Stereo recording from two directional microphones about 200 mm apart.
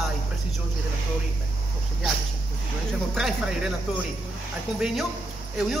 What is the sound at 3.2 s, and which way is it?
Speech, 5° right (ahead or behind).